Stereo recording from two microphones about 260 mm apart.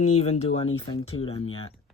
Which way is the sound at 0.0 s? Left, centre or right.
Left.